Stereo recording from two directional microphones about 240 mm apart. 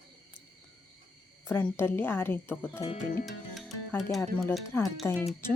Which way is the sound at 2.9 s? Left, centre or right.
Left.